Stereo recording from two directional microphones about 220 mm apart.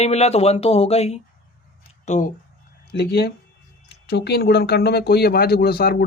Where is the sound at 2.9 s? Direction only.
45° left (ahead or behind).